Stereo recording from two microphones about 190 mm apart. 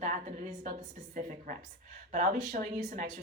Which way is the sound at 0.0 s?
40° right (ahead or behind).